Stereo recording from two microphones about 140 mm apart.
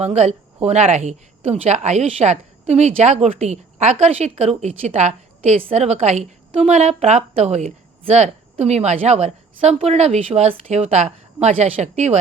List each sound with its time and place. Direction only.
0.0 s a woman's voice: 50° right (ahead or behind)